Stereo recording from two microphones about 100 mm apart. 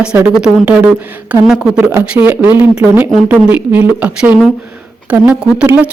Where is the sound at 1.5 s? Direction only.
5° right (ahead or behind).